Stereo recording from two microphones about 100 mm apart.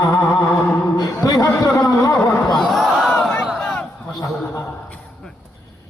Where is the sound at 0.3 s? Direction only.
30° left (ahead or behind).